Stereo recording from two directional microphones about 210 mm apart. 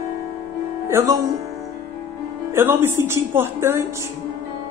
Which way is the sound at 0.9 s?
15° right (ahead or behind).